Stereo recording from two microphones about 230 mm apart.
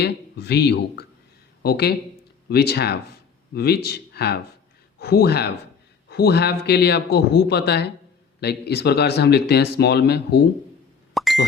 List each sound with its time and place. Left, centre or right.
0.0 s speech: left
11.1 s plop: centre